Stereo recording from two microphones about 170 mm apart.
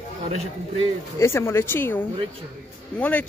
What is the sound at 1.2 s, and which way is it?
Speech, 15° left (ahead or behind).